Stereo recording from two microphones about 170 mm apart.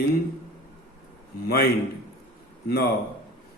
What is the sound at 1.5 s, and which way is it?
A man's voice, 70° left (ahead or behind).